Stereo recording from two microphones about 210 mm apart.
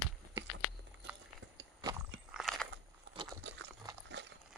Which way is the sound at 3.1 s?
55° right (ahead or behind).